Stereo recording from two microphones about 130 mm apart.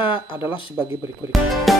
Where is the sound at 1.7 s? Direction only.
Centre (ahead or behind).